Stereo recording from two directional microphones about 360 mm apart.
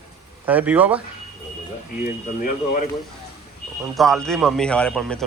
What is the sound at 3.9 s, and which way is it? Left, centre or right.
A man's voice, centre.